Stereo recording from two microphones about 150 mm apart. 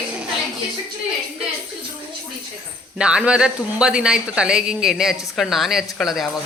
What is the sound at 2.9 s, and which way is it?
Speech, 5° right (ahead or behind).